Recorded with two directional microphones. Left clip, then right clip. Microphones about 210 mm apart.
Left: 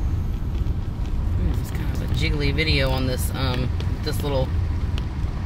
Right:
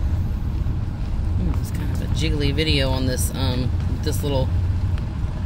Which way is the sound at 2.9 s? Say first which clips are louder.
Right 1 dB; 20° right (ahead or behind).